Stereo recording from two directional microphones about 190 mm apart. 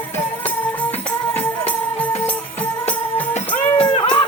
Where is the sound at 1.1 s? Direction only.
10° left (ahead or behind).